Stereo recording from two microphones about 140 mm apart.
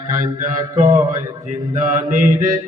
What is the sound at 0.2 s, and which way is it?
Mantra, 65° right (ahead or behind).